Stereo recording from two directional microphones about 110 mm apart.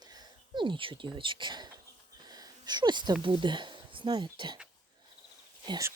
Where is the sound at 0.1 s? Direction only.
45° right (ahead or behind).